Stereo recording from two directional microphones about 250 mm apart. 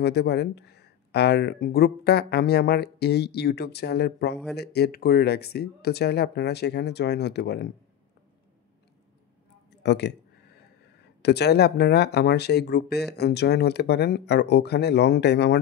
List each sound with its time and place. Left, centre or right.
0.0 s speech: left
9.8 s speech: left
11.2 s speech: left